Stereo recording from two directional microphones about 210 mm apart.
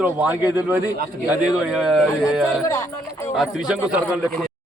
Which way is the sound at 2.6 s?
15° left (ahead or behind).